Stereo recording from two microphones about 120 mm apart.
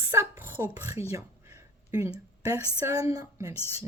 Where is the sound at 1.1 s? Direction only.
25° right (ahead or behind).